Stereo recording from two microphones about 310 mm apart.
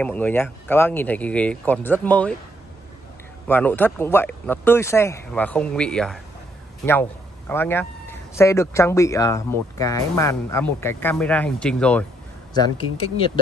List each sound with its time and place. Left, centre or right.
0.0 s speech: centre
3.4 s speech: centre
12.5 s speech: centre